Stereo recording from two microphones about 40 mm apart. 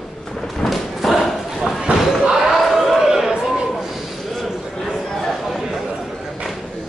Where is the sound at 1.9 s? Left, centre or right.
Right.